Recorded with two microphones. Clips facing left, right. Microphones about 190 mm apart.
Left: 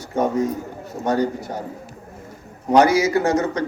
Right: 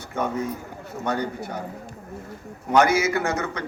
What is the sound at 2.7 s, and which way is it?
Speech, 35° left (ahead or behind).